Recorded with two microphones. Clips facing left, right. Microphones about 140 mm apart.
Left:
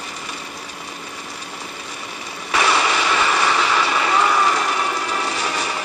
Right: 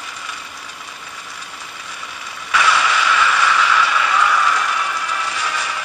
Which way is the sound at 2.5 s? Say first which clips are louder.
Right 1 dB; 35° left (ahead or behind).